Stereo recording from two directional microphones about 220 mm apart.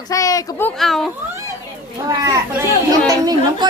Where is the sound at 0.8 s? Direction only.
Centre (ahead or behind).